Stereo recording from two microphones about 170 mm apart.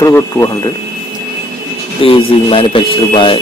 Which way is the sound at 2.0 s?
30° left (ahead or behind).